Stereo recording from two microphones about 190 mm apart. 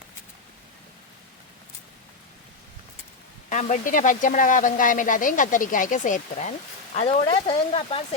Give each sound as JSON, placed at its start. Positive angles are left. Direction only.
{"t": 3.5, "sound": "speech", "side_deg": 40}
{"t": 6.9, "sound": "speech", "side_deg": 30}